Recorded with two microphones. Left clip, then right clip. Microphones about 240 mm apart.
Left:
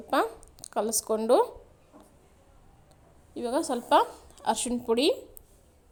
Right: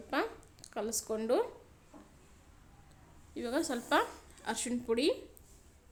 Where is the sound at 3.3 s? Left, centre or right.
Centre.